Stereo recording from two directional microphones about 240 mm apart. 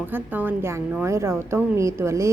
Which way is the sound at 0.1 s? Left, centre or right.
Centre.